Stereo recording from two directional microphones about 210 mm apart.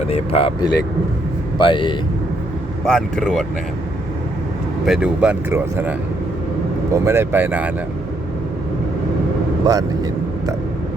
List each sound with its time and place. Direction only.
0.1 s speech: 30° left (ahead or behind)
2.8 s speech: centre (ahead or behind)
4.9 s speech: 5° right (ahead or behind)
6.9 s speech: 15° right (ahead or behind)
9.6 s speech: 15° right (ahead or behind)